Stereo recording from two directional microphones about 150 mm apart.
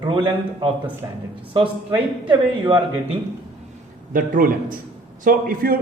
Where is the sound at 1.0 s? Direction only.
25° right (ahead or behind).